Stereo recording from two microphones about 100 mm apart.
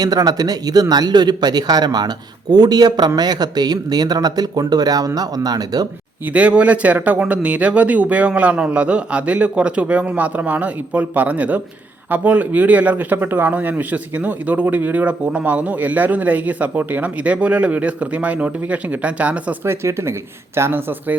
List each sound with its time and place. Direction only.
0.0 s a man's voice: 40° right (ahead or behind)
6.2 s speech: 15° right (ahead or behind)
19.6 s a man's voice: 25° right (ahead or behind)